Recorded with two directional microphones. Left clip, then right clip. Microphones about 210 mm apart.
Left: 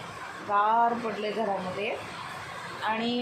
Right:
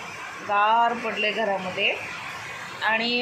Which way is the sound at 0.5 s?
15° right (ahead or behind).